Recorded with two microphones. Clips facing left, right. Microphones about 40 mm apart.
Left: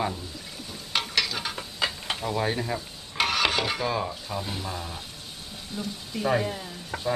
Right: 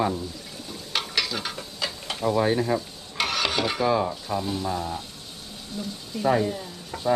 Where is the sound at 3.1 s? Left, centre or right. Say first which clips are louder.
Left 1 dB; centre.